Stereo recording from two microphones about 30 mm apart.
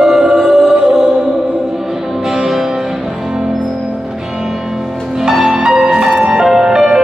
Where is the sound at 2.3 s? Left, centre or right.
Centre.